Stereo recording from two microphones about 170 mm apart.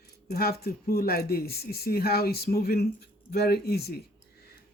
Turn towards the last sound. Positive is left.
turn(degrees=65)  # may be behind; listen again after turning